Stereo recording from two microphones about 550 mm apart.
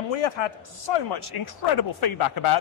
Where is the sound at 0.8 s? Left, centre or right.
Left.